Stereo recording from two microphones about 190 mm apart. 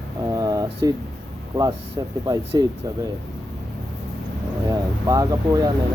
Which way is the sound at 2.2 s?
20° right (ahead or behind).